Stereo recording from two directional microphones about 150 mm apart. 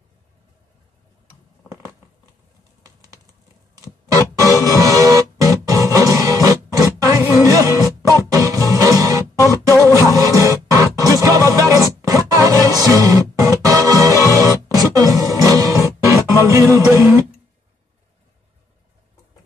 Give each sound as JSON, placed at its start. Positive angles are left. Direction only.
{"t": 2.8, "sound": "bird", "side_deg": -25}
{"t": 3.7, "sound": "music", "side_deg": -20}
{"t": 9.7, "sound": "music", "side_deg": 20}
{"t": 10.0, "sound": "music", "side_deg": -25}